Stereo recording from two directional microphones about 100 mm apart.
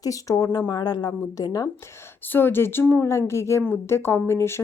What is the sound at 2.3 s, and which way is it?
Speech, 20° left (ahead or behind).